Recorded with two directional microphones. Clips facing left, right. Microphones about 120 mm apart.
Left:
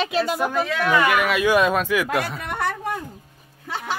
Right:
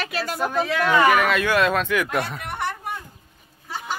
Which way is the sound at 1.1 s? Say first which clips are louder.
Left 1 dB; 5° left (ahead or behind).